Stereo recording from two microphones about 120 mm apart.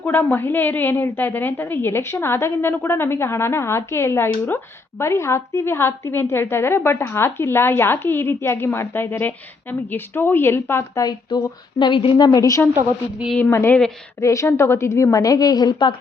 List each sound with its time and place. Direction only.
0.0 s a woman's voice: 15° left (ahead or behind)
11.0 s a woman's voice: 35° left (ahead or behind)
12.1 s a woman's voice: 30° left (ahead or behind)
13.3 s a woman's voice: 20° left (ahead or behind); by 16.0 s 40° left (ahead or behind)